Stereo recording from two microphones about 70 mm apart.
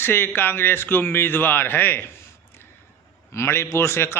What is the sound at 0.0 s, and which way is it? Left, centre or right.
A man's voice, left.